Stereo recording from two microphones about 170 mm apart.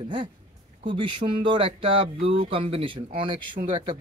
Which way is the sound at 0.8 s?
30° right (ahead or behind).